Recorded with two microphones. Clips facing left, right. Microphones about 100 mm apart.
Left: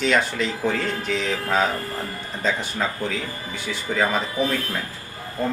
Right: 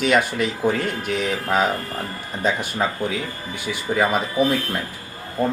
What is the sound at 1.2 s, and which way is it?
Speech, 10° right (ahead or behind).